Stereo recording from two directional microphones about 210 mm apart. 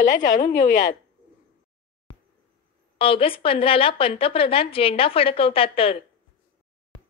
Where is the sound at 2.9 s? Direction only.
25° left (ahead or behind).